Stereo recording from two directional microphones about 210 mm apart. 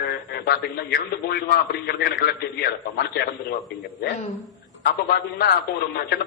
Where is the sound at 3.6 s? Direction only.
Centre (ahead or behind).